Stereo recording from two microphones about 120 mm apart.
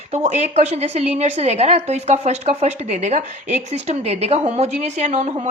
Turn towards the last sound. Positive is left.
turn(degrees=-80)